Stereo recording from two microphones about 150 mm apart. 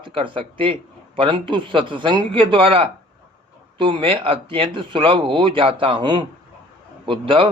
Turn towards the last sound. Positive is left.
turn(degrees=-35)  # may be behind; listen again after turning